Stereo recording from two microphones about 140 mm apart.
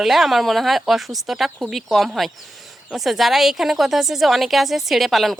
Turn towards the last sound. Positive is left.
turn(degrees=0)  # may be behind; listen again after turning